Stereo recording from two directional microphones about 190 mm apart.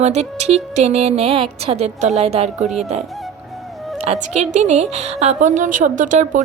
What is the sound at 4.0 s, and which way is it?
A woman's voice, 35° right (ahead or behind).